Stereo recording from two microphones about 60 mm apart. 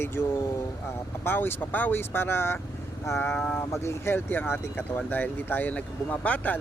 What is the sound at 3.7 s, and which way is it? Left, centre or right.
Speech, left.